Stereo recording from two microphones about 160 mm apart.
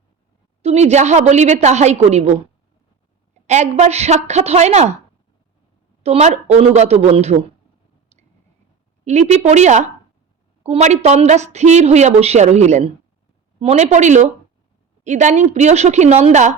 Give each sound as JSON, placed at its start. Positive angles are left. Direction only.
{"t": 0.6, "sound": "a woman's voice", "side_deg": -45}
{"t": 3.4, "sound": "a woman's voice", "side_deg": -45}
{"t": 6.0, "sound": "a woman's voice", "side_deg": -45}
{"t": 8.1, "sound": "a sound", "side_deg": -45}
{"t": 9.0, "sound": "a woman's voice", "side_deg": -45}